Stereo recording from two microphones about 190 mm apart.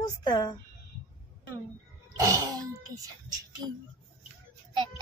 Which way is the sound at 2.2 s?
15° right (ahead or behind).